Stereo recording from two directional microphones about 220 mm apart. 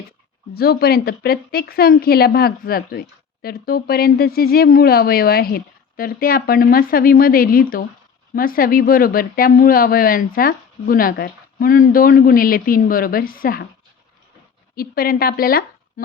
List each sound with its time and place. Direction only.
0.5 s a woman's voice: 45° left (ahead or behind)
14.8 s speech: 40° left (ahead or behind)